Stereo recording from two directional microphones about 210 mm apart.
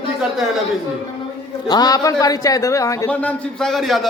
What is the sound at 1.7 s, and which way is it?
A man's voice, 20° left (ahead or behind).